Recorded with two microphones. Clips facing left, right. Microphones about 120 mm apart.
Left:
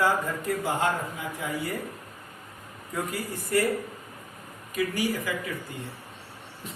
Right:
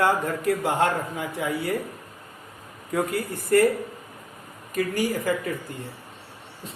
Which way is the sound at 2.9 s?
65° right (ahead or behind).